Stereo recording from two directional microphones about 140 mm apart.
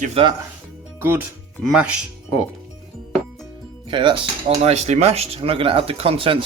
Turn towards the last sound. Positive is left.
turn(degrees=-40)  # may be behind; listen again after turning